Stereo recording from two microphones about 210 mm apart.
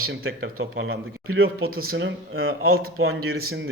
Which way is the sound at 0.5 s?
75° right (ahead or behind).